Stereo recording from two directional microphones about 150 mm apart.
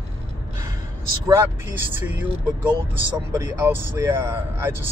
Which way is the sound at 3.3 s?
15° right (ahead or behind).